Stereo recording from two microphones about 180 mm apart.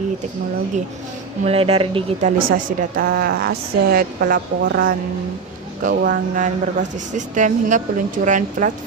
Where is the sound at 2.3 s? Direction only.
50° right (ahead or behind).